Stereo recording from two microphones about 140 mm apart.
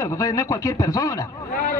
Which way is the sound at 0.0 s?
25° left (ahead or behind).